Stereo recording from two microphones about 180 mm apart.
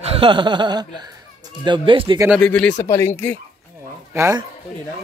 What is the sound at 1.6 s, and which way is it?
Speech, 25° right (ahead or behind).